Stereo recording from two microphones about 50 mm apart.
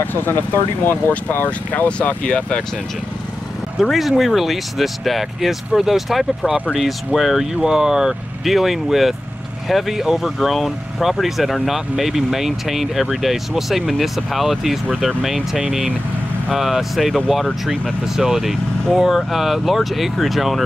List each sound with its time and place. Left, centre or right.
0.0 s speech: left
1.9 s speech: left
3.9 s speech: centre